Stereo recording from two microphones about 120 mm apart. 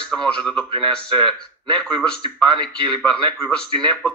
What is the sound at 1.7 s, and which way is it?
Speech, 5° left (ahead or behind).